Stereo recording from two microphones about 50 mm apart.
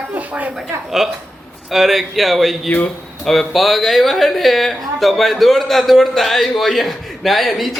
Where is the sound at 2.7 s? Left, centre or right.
Left.